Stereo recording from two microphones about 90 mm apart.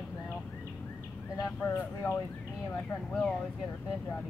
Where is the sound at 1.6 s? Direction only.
25° left (ahead or behind).